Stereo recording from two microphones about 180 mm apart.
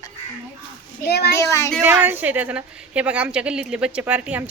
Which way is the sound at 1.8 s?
10° right (ahead or behind).